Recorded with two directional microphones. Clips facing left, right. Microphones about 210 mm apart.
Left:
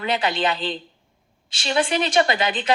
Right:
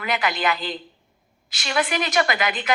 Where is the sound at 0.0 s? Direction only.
30° left (ahead or behind).